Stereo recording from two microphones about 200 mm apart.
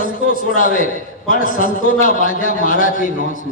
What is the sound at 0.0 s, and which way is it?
A man's voice, 40° left (ahead or behind).